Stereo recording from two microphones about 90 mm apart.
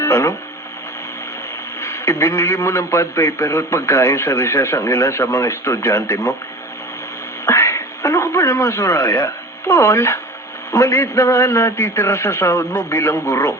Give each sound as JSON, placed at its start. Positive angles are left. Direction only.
{"t": 0.0, "sound": "speech", "side_deg": 30}
{"t": 1.8, "sound": "a man's voice", "side_deg": 30}
{"t": 7.4, "sound": "a man's voice", "side_deg": 30}